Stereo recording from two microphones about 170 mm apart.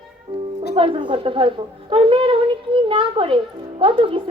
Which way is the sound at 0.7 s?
30° right (ahead or behind).